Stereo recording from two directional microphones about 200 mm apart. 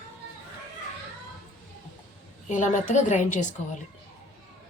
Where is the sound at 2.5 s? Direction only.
40° left (ahead or behind).